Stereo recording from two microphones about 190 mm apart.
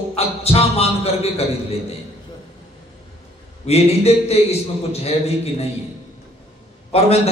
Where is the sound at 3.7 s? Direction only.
35° left (ahead or behind).